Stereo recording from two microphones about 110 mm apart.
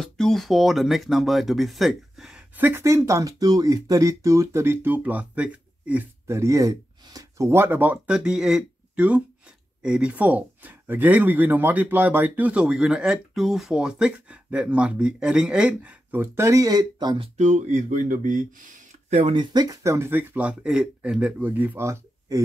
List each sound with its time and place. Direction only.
0.0 s speech: 5° left (ahead or behind)
2.5 s speech: 20° right (ahead or behind)
6.2 s speech: 25° right (ahead or behind)
17.2 s speech: 90° right
19.0 s speech: 75° right (ahead or behind)
19.3 s speech: 40° right (ahead or behind); by 21.8 s 15° right (ahead or behind)
21.8 s a sound: 25° right (ahead or behind)